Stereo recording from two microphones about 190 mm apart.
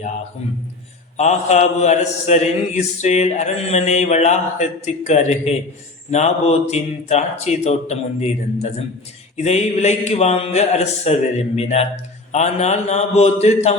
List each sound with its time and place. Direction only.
1.1 s a man's voice: 35° left (ahead or behind)